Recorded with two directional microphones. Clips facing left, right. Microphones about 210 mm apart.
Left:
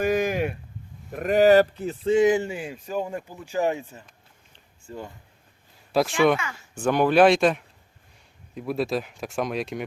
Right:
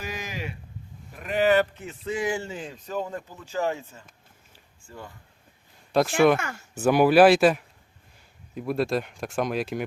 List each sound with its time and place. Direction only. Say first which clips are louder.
0.0 s a sound: left 12 dB; 55° left (ahead or behind)
1.1 s speech: left 5 dB; 45° left (ahead or behind)
2.0 s speech: left 9 dB; 25° left (ahead or behind)
5.9 s speech: right 1 dB; centre (ahead or behind)